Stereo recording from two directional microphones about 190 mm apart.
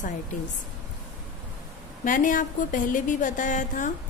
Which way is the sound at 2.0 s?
45° left (ahead or behind).